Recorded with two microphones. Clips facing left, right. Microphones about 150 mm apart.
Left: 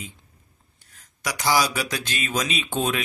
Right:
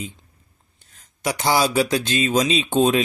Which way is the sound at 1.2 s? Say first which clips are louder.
Right 3 dB; 25° right (ahead or behind).